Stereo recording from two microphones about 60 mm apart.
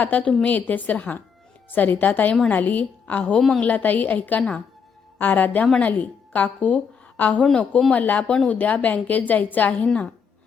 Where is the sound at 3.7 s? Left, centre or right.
Left.